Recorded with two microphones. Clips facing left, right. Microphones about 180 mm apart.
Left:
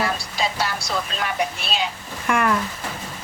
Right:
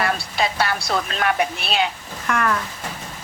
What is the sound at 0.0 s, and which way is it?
Speech, 60° right (ahead or behind).